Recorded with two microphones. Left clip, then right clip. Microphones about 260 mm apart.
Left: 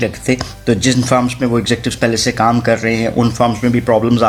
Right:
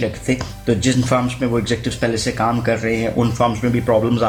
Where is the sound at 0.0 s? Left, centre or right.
Left.